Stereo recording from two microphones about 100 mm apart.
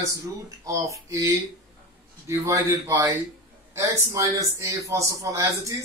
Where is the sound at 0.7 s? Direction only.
30° right (ahead or behind).